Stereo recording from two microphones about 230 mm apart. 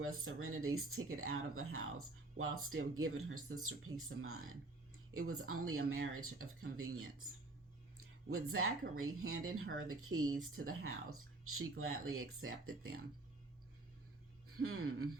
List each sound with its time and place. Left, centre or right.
0.3 s speech: right
10.2 s speech: centre
10.5 s speech: right
14.4 s speech: right